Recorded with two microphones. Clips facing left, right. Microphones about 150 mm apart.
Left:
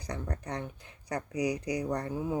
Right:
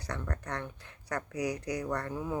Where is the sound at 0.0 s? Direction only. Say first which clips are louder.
Left 1 dB; 15° left (ahead or behind).